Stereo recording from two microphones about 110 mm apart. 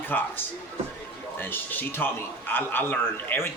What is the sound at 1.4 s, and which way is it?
A man's voice, 15° left (ahead or behind).